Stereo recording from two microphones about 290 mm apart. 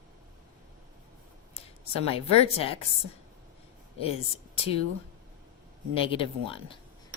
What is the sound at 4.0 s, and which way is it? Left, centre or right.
Speech, centre.